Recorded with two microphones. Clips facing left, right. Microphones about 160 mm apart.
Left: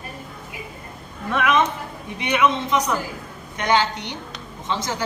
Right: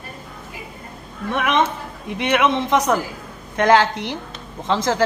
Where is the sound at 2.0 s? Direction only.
85° right.